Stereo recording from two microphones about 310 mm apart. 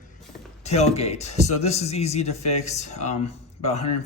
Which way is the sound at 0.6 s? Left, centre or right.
Left.